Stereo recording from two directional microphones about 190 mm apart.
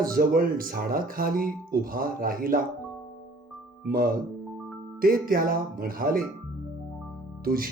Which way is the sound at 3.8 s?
50° right (ahead or behind).